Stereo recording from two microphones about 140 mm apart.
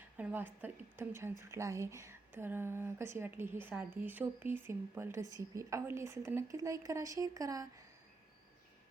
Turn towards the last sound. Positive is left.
turn(degrees=-25)  # may be behind; listen again after turning